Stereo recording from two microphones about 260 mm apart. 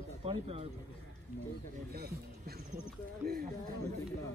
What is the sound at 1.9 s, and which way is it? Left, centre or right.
Speech, right.